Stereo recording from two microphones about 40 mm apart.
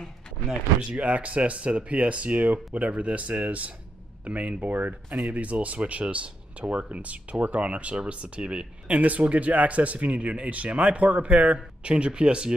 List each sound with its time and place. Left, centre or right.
0.9 s speech: right
11.9 s speech: right